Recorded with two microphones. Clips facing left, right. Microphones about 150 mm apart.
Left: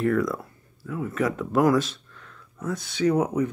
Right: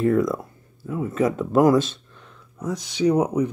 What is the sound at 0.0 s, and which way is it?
Speech, 25° right (ahead or behind).